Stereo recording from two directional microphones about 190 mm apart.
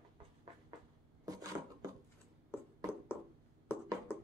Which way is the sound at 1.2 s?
20° right (ahead or behind).